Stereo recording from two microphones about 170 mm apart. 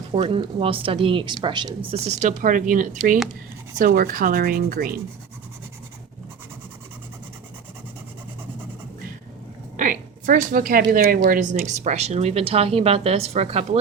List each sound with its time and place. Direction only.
0.1 s speech: 30° right (ahead or behind)
1.9 s speech: 40° right (ahead or behind)
2.4 s speech: 50° right (ahead or behind)
3.8 s sanding: 60° right (ahead or behind)
9.7 s a sound: 50° right (ahead or behind)
10.9 s sanding: 55° right (ahead or behind)
11.6 s speech: 45° right (ahead or behind)